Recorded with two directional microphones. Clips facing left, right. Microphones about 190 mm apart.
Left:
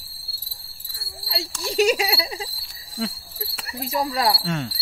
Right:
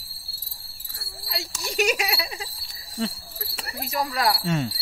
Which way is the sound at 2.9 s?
5° left (ahead or behind).